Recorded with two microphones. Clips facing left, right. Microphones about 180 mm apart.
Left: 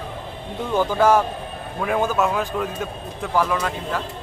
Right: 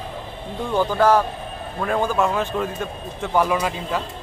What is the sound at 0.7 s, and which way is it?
A man's voice, 10° left (ahead or behind).